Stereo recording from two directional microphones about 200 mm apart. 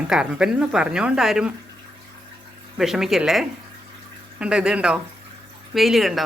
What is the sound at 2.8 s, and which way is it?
Speech, centre (ahead or behind).